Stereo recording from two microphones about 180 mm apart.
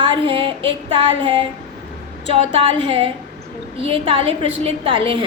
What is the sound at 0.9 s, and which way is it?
A woman's voice, 30° right (ahead or behind).